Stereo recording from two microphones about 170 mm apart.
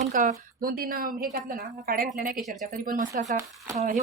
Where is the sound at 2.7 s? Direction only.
55° right (ahead or behind).